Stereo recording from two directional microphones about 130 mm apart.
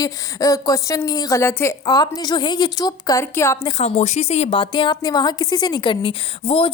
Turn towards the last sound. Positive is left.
turn(degrees=40)  # may be behind; listen again after turning